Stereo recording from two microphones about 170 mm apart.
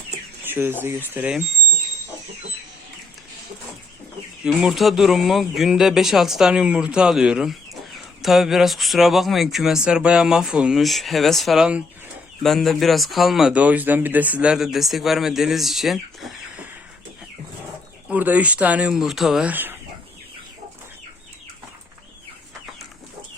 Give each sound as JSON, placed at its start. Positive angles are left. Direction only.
{"t": 0.4, "sound": "speech", "side_deg": -10}
{"t": 4.4, "sound": "speech", "side_deg": 0}
{"t": 18.1, "sound": "speech", "side_deg": -10}